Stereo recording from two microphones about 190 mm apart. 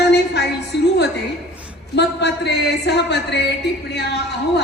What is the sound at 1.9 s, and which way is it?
A woman's voice, 65° left (ahead or behind).